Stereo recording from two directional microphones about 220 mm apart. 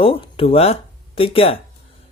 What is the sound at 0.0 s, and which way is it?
Speech, 25° left (ahead or behind).